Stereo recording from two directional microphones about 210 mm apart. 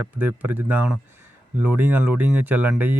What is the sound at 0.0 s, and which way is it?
Speech, 10° right (ahead or behind).